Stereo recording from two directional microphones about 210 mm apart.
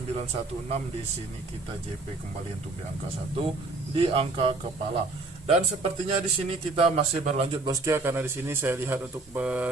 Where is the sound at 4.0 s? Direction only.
25° right (ahead or behind).